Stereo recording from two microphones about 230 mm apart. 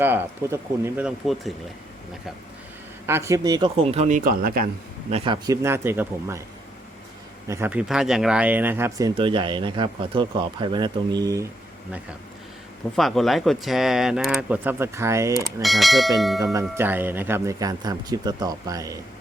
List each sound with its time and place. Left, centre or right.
0.0 s speech: centre
3.1 s speech: centre; by 4.7 s right
5.1 s speech: right
7.4 s speech: centre
15.6 s speech: centre
16.4 s speech: centre